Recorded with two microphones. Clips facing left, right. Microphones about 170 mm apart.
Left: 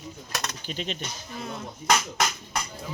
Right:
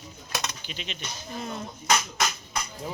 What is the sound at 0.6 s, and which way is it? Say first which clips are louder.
Speech: left 6 dB; 45° left (ahead or behind).